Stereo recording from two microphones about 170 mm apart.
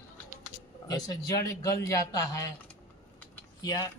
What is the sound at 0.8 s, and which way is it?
A man's voice, 20° left (ahead or behind).